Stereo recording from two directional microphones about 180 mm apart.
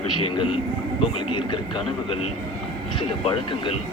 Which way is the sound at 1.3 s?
25° left (ahead or behind).